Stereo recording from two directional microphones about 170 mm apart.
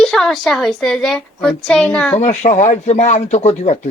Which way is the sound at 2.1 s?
45° left (ahead or behind).